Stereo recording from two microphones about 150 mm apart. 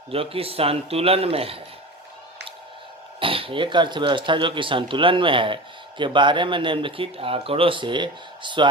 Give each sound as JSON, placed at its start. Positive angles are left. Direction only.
{"t": 0.1, "sound": "speech", "side_deg": -40}
{"t": 3.2, "sound": "speech", "side_deg": -35}